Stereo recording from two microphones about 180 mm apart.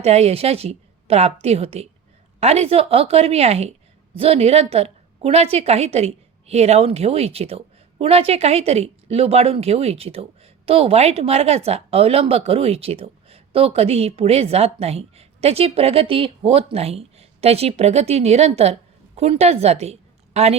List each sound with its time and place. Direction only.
0.0 s a woman's voice: 35° right (ahead or behind)